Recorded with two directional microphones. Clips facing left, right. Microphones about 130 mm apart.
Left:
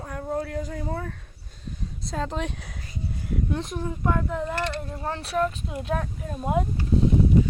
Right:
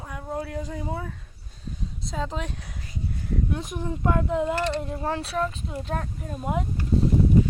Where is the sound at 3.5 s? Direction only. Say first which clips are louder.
Left 1 dB; 10° right (ahead or behind).